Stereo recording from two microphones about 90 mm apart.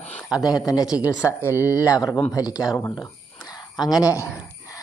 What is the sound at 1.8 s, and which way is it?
Speech, 40° left (ahead or behind).